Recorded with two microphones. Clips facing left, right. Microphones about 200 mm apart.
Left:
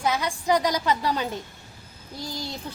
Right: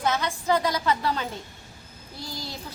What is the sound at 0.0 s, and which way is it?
Speech, 10° left (ahead or behind).